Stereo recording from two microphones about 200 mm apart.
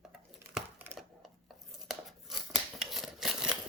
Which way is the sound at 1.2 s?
Centre (ahead or behind).